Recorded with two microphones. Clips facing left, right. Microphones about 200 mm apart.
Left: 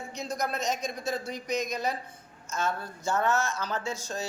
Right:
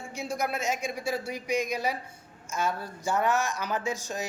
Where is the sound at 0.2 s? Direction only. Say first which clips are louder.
Right 1 dB; 10° right (ahead or behind).